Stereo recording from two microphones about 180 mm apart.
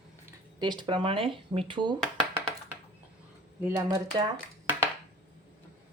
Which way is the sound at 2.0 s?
5° left (ahead or behind).